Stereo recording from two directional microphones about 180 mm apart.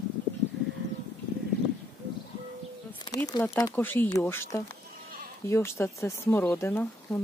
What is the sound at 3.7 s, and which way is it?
Speech, 10° left (ahead or behind).